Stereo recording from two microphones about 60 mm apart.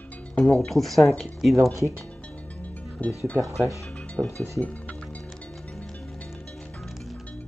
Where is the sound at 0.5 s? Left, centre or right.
Centre.